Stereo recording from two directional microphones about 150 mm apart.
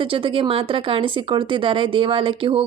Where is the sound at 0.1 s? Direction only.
35° right (ahead or behind).